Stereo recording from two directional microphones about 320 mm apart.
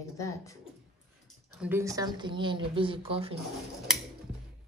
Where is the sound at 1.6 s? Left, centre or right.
Centre.